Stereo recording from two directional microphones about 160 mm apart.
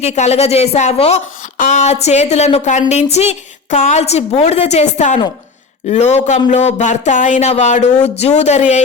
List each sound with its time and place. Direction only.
0.0 s speech: 40° left (ahead or behind)